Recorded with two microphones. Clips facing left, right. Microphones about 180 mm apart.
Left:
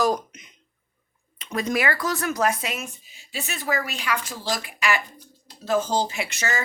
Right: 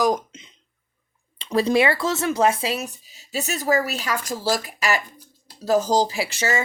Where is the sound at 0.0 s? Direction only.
25° right (ahead or behind).